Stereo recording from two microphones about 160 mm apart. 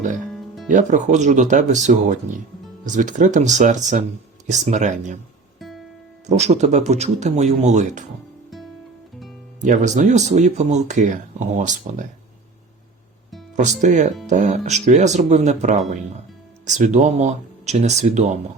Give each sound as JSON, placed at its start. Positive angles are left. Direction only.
{"t": 0.3, "sound": "music", "side_deg": 0}
{"t": 0.7, "sound": "speech", "side_deg": -50}
{"t": 5.5, "sound": "music", "side_deg": 0}
{"t": 6.2, "sound": "speech", "side_deg": -45}
{"t": 9.6, "sound": "speech", "side_deg": -50}
{"t": 13.6, "sound": "speech", "side_deg": -50}